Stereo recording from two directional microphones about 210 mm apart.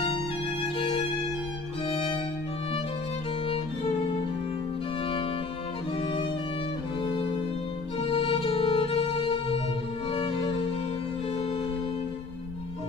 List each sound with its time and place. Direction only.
0.7 s music: 25° left (ahead or behind)
8.0 s music: 25° left (ahead or behind)